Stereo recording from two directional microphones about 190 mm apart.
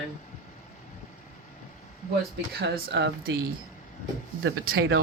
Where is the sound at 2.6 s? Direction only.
60° right (ahead or behind).